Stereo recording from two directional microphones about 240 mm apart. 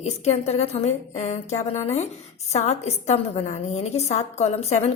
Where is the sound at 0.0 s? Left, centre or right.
Left.